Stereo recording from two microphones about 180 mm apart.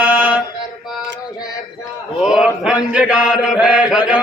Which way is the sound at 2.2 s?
5° right (ahead or behind).